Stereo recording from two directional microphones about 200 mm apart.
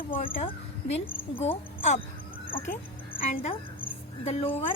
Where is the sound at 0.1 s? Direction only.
45° left (ahead or behind).